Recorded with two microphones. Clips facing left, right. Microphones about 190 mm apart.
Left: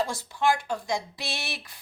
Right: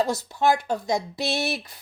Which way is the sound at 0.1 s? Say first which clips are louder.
Right 4 dB; 40° right (ahead or behind).